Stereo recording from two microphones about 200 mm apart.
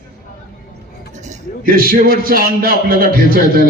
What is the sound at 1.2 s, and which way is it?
A man's voice, 40° right (ahead or behind).